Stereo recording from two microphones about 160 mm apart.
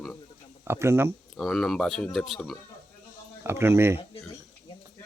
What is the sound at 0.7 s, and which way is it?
Speech, 15° right (ahead or behind).